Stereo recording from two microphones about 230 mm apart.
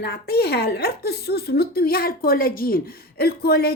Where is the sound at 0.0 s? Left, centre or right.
Left.